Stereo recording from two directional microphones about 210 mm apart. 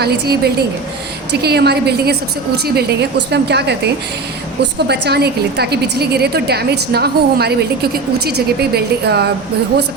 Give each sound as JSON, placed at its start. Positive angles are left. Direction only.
{"t": 0.0, "sound": "a woman's voice", "side_deg": -50}
{"t": 4.9, "sound": "a woman's voice", "side_deg": -50}